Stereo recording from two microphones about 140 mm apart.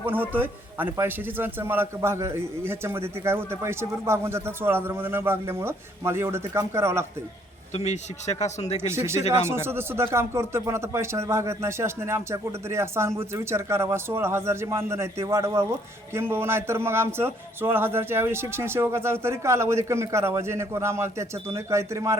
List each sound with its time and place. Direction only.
0.0 s a man's voice: 15° right (ahead or behind)
7.7 s speech: 50° left (ahead or behind)
8.9 s a man's voice: 20° right (ahead or behind)